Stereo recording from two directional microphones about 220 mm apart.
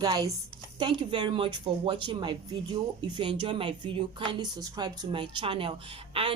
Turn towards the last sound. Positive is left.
turn(degrees=-25)  # may be behind; listen again after turning